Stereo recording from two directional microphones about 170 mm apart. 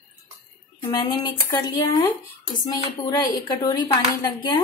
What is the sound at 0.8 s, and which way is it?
Speech, 25° left (ahead or behind).